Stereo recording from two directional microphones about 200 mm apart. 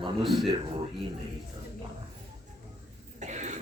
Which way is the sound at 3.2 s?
35° right (ahead or behind).